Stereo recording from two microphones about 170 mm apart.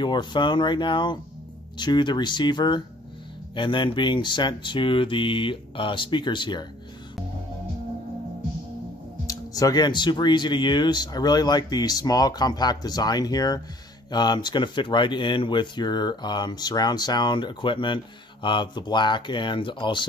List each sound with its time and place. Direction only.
0.0 s speech: 25° left (ahead or behind)
9.3 s speech: 20° left (ahead or behind)